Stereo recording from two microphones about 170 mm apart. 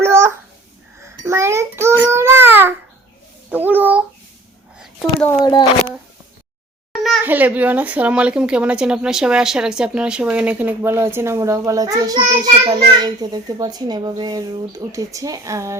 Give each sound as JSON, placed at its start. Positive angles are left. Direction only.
{"t": 0.0, "sound": "babbling", "side_deg": -15}
{"t": 1.2, "sound": "speech", "side_deg": -15}
{"t": 6.9, "sound": "a sound", "side_deg": 0}
{"t": 7.3, "sound": "speech", "side_deg": -10}